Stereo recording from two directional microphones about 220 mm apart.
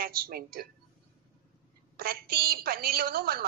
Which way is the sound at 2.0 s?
45° right (ahead or behind).